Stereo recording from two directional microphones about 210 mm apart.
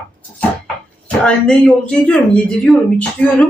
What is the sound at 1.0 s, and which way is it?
Speech, 5° left (ahead or behind).